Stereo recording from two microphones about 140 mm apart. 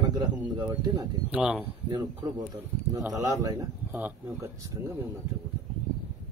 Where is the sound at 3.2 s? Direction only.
25° right (ahead or behind).